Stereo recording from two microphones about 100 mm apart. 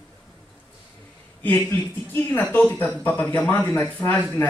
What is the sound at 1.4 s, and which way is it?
Speech, 20° left (ahead or behind).